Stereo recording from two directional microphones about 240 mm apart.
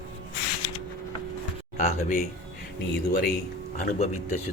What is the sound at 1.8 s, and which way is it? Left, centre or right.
Speech, left.